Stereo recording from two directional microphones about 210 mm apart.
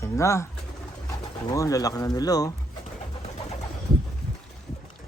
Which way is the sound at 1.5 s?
15° left (ahead or behind).